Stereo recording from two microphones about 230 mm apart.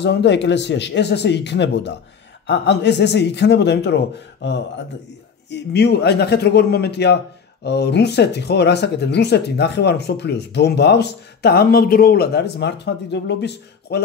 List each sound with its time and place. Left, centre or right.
0.0 s speech: left